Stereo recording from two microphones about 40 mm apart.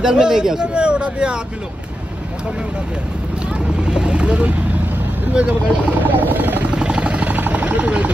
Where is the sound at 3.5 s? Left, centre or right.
Right.